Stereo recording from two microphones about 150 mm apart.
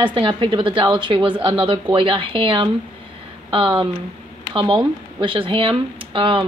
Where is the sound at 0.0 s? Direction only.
35° right (ahead or behind).